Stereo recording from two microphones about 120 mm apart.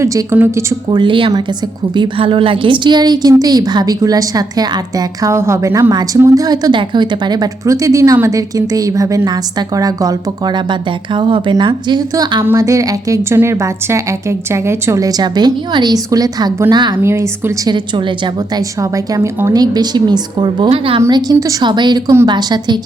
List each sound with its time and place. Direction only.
0.0 s a woman's voice: 25° right (ahead or behind)
0.9 s a woman's voice: 40° right (ahead or behind)
17.0 s a woman's voice: 20° right (ahead or behind)
17.7 s speech: 40° right (ahead or behind)
18.5 s a woman's voice: 30° right (ahead or behind)
20.7 s speech: 50° right (ahead or behind)
21.1 s speech: 35° right (ahead or behind)